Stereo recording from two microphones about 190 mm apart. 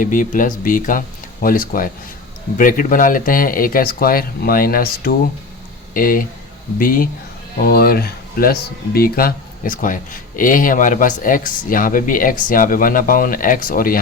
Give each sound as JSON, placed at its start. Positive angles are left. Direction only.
{"t": 0.0, "sound": "speech", "side_deg": 45}